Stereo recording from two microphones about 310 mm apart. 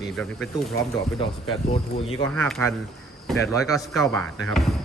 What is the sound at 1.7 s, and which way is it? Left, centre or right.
Speech, centre.